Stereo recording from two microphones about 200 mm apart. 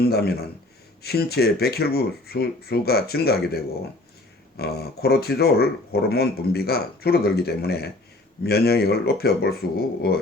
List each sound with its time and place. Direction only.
0.1 s speech: 50° left (ahead or behind)